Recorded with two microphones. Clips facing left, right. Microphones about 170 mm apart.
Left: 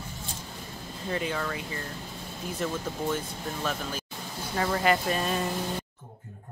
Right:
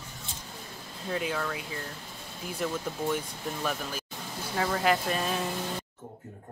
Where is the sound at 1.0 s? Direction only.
Centre (ahead or behind).